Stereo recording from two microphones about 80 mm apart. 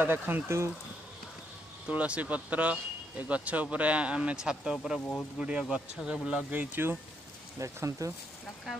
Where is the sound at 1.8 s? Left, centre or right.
Centre.